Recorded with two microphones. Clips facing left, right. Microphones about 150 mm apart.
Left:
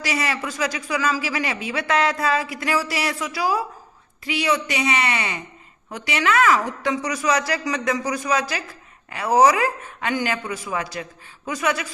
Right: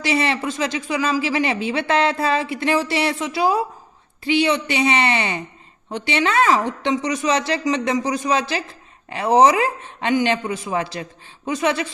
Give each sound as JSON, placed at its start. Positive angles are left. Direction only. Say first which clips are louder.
{"t": 0.0, "sound": "speech", "louder": "right 5 dB", "side_deg": -25}